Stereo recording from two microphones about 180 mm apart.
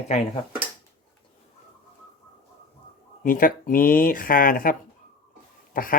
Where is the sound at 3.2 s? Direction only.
50° left (ahead or behind).